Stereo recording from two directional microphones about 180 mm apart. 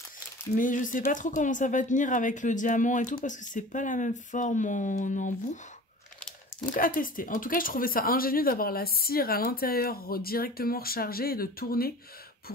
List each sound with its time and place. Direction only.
0.6 s speech: 45° left (ahead or behind)
6.7 s speech: 50° left (ahead or behind)